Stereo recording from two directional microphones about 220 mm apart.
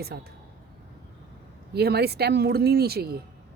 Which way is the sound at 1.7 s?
45° right (ahead or behind).